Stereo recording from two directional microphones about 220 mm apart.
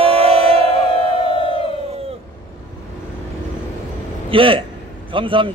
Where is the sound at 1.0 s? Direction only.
25° left (ahead or behind).